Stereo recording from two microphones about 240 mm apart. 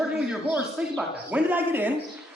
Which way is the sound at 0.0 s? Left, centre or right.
Centre.